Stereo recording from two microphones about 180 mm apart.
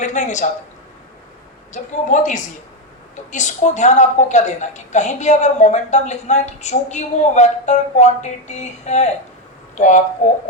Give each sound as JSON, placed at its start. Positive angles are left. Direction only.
{"t": 0.0, "sound": "speech", "side_deg": 40}
{"t": 1.7, "sound": "a woman's voice", "side_deg": 45}